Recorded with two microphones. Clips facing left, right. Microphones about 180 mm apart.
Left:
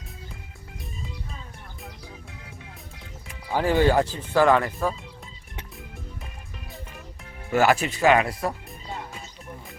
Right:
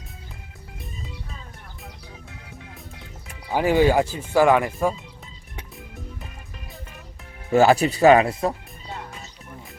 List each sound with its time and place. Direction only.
3.5 s speech: 15° right (ahead or behind)
7.5 s speech: 30° right (ahead or behind)